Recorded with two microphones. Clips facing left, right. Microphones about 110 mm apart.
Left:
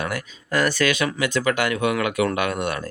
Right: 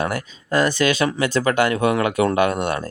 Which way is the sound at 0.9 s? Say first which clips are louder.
Right 3 dB; 35° right (ahead or behind).